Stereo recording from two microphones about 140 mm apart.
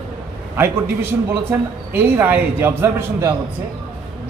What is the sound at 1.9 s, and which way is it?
A man's voice, 15° right (ahead or behind).